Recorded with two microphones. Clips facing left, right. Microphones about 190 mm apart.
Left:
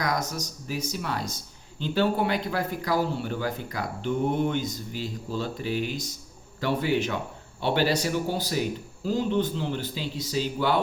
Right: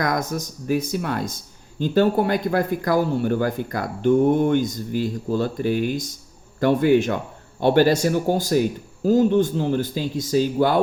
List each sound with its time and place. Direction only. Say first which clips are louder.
0.0 s speech: right 5 dB; 50° right (ahead or behind)